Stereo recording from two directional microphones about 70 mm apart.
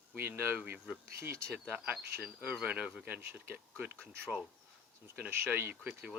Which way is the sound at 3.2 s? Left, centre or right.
Right.